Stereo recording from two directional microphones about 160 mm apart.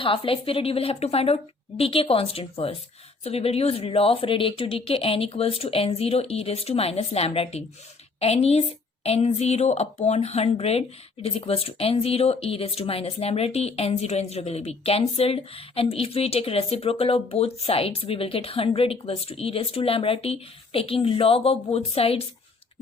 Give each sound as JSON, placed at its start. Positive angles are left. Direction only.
{"t": 0.0, "sound": "speech", "side_deg": 35}